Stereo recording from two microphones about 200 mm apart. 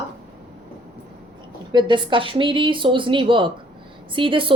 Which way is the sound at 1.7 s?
25° right (ahead or behind).